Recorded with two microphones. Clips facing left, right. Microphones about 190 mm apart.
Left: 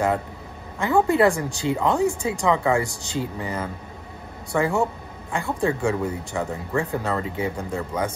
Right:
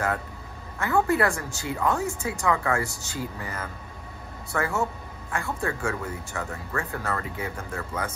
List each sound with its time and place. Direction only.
0.7 s speech: 20° left (ahead or behind)